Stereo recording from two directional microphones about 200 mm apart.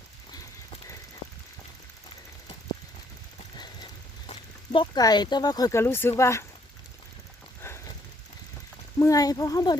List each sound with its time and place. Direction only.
4.3 s speech: 25° left (ahead or behind)
9.0 s speech: 15° left (ahead or behind)